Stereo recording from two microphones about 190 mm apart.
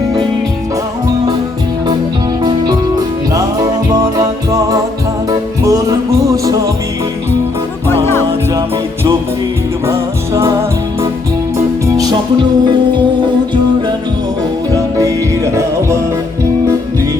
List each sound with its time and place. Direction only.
3.3 s music: 20° right (ahead or behind)
9.8 s music: 15° right (ahead or behind)
14.7 s music: 15° right (ahead or behind)